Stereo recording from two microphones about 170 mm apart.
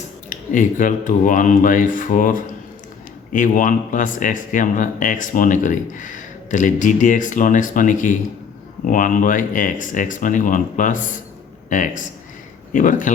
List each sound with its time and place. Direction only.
0.3 s speech: 50° left (ahead or behind)